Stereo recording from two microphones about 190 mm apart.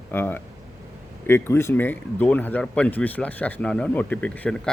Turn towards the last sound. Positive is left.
turn(degrees=5)  # may be behind; listen again after turning